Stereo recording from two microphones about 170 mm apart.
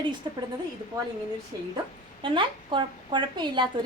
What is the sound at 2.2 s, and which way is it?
A woman's voice, 30° right (ahead or behind).